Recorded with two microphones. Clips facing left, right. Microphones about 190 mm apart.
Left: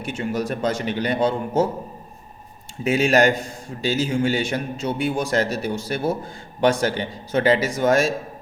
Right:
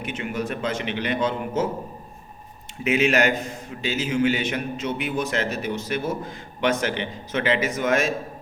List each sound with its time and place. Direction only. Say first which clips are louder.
0.2 s a man's voice: left 4 dB; 40° left (ahead or behind)
2.8 s a man's voice: left 3 dB; 35° left (ahead or behind)